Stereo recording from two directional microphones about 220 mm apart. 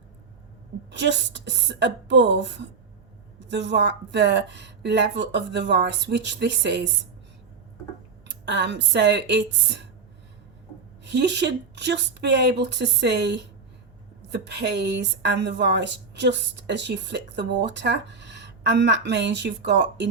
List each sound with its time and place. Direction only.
0.9 s a woman's voice: 50° right (ahead or behind)
8.3 s a woman's voice: 55° right (ahead or behind)
11.0 s a woman's voice: 50° right (ahead or behind)